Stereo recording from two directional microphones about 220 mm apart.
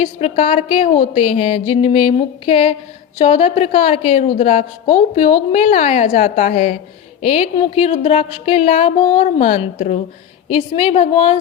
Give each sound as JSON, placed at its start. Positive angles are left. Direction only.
{"t": 0.0, "sound": "a woman's voice", "side_deg": 25}